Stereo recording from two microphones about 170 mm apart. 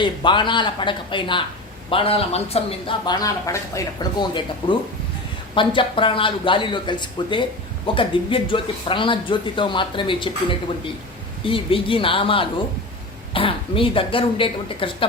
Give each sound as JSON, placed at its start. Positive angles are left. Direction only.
{"t": 0.0, "sound": "speech", "side_deg": 30}
{"t": 3.2, "sound": "speech", "side_deg": 20}